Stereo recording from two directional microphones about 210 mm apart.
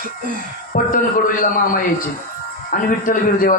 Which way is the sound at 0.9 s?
40° left (ahead or behind).